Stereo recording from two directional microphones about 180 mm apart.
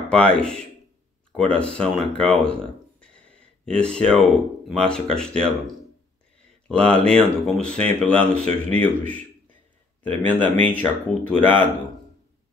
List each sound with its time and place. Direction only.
0.1 s speech: 5° left (ahead or behind)
3.6 s speech: 5° left (ahead or behind)
6.7 s speech: 5° left (ahead or behind)